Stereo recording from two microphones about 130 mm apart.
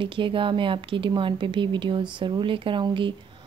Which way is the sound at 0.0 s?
40° right (ahead or behind).